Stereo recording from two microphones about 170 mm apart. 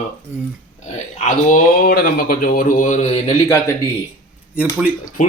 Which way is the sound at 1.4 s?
55° left (ahead or behind).